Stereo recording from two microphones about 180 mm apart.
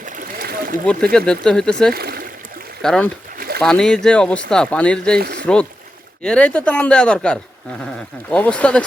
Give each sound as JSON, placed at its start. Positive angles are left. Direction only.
{"t": 0.0, "sound": "a sound", "side_deg": -50}
{"t": 1.1, "sound": "speech", "side_deg": 5}
{"t": 1.9, "sound": "speech", "side_deg": -60}
{"t": 2.8, "sound": "speech", "side_deg": 5}
{"t": 3.3, "sound": "bird", "side_deg": -55}
{"t": 3.6, "sound": "speech", "side_deg": 5}
{"t": 5.1, "sound": "speech", "side_deg": -60}
{"t": 6.2, "sound": "speech", "side_deg": 5}